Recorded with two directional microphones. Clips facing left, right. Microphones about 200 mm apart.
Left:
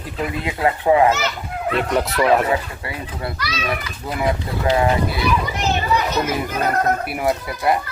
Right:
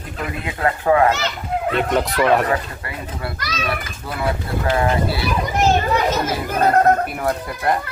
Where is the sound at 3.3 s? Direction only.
45° right (ahead or behind).